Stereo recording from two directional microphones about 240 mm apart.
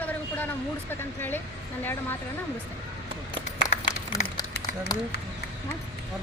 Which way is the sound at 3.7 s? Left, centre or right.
Left.